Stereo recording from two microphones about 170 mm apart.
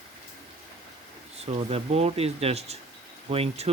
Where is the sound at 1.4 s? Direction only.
35° right (ahead or behind).